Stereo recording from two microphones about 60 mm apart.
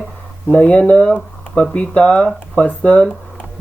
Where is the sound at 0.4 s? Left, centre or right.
Left.